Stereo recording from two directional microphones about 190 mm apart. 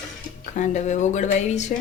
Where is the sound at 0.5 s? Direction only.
40° left (ahead or behind).